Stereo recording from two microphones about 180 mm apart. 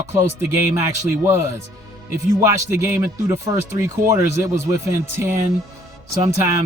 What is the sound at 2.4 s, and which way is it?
Speech, 15° right (ahead or behind).